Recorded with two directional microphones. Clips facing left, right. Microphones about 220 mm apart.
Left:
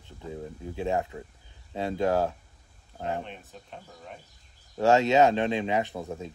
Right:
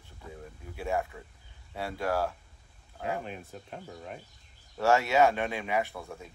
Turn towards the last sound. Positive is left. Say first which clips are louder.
# left 5 dB
turn(degrees=20)  # may be behind; listen again after turning